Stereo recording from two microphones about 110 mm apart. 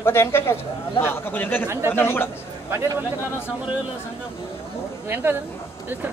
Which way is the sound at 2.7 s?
25° right (ahead or behind).